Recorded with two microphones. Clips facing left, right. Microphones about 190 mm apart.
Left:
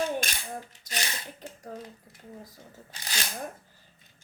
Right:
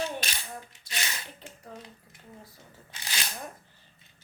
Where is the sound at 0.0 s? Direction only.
50° left (ahead or behind).